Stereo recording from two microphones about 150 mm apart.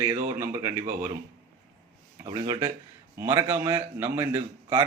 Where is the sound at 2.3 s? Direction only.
25° right (ahead or behind).